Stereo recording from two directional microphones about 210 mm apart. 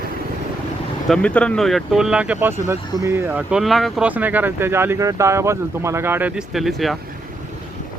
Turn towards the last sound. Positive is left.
turn(degrees=0)  # may be behind; listen again after turning